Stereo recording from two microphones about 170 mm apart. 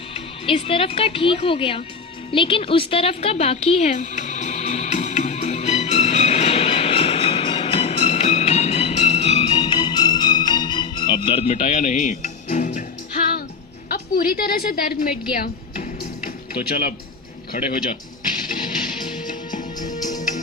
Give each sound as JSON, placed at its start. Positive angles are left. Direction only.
{"t": 0.1, "sound": "speech", "side_deg": 35}
{"t": 2.3, "sound": "music", "side_deg": 30}
{"t": 9.6, "sound": "music", "side_deg": 25}
{"t": 11.5, "sound": "music", "side_deg": 45}
{"t": 13.9, "sound": "a woman's voice", "side_deg": 60}
{"t": 15.4, "sound": "music", "side_deg": 55}
{"t": 17.5, "sound": "a man's voice", "side_deg": 55}
{"t": 19.5, "sound": "music", "side_deg": 50}